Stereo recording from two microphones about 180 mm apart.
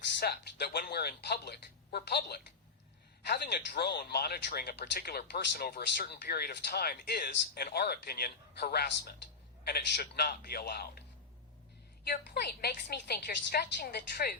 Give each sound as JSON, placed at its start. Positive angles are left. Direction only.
{"t": 0.2, "sound": "speech", "side_deg": 60}
{"t": 12.0, "sound": "speech", "side_deg": 60}